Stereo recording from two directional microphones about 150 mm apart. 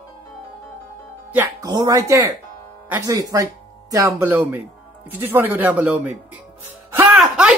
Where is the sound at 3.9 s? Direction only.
15° right (ahead or behind).